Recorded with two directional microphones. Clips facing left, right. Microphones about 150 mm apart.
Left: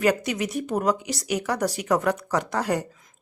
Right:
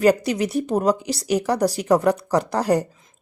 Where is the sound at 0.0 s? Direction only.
35° right (ahead or behind).